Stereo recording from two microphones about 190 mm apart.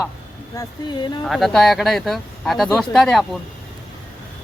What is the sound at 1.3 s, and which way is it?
Speech, centre (ahead or behind).